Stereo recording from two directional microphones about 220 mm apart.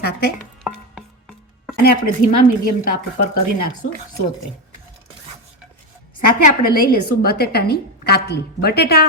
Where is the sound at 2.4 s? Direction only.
40° left (ahead or behind).